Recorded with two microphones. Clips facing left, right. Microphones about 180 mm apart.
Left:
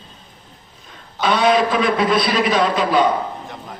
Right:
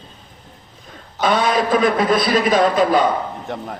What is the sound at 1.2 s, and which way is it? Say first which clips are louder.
A man's voice: left 1 dB; 45° right (ahead or behind).